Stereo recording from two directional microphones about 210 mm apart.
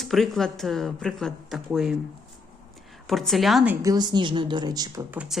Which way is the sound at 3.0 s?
Centre (ahead or behind).